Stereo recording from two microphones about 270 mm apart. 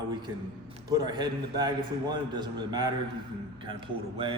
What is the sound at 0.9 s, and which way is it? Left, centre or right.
A man's voice, centre.